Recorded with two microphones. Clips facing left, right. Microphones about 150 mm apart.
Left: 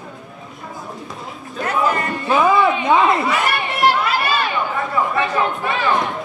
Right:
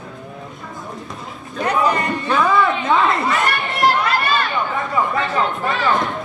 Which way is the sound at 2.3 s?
15° left (ahead or behind).